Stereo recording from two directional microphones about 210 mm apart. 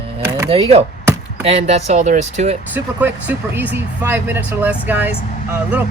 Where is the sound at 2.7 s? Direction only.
10° right (ahead or behind).